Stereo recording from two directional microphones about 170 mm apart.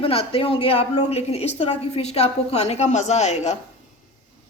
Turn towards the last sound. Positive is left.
turn(degrees=40)  # may be behind; listen again after turning